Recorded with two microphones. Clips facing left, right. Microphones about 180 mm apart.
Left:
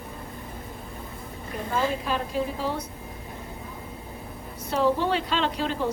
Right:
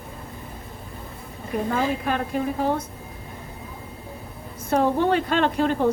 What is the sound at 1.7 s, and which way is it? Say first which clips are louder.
Speech: even; 55° right (ahead or behind).